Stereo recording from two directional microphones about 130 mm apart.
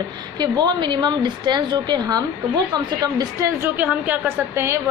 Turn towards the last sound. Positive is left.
turn(degrees=-15)  # may be behind; listen again after turning